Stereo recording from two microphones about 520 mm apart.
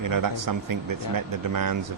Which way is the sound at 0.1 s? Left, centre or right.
Right.